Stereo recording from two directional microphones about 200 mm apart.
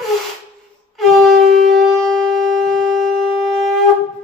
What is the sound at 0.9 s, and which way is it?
Music, centre (ahead or behind).